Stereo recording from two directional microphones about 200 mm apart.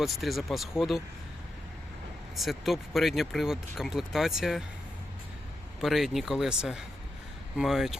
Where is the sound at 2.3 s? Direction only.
Centre (ahead or behind).